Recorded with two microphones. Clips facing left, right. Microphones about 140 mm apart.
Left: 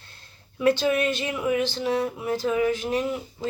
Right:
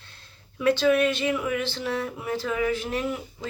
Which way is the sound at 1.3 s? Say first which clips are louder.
Left 2 dB; 20° left (ahead or behind).